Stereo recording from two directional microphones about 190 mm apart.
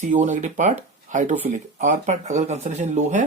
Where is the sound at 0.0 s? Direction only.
40° right (ahead or behind).